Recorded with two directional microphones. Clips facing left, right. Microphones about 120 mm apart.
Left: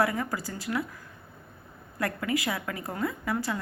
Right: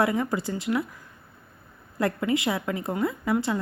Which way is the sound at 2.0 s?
25° right (ahead or behind).